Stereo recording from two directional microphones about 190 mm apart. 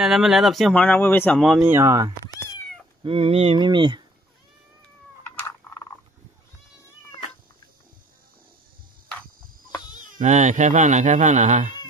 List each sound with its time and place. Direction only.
0.0 s speech: centre (ahead or behind)
1.4 s speech: 5° right (ahead or behind)
3.0 s speech: 30° right (ahead or behind)
10.1 s speech: 40° right (ahead or behind)